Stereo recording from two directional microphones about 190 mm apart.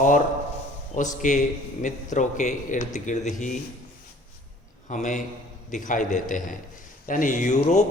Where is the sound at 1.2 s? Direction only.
40° left (ahead or behind).